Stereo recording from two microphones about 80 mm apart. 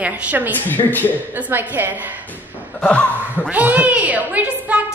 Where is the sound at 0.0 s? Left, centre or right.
Right.